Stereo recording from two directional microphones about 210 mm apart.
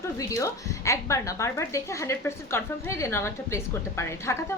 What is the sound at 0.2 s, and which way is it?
A woman's voice, 15° left (ahead or behind).